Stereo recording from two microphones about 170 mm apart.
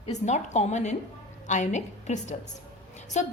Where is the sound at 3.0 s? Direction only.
45° left (ahead or behind).